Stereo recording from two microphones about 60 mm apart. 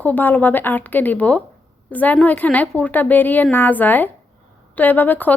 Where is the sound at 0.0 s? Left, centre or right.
Left.